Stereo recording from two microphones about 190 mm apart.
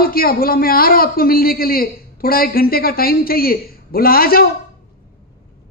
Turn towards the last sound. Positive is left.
turn(degrees=50)  # may be behind; listen again after turning